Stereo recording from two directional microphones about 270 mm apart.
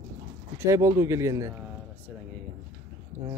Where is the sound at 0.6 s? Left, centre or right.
Centre.